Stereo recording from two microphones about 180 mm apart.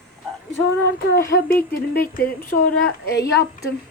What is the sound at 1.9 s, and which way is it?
Speech, 60° left (ahead or behind).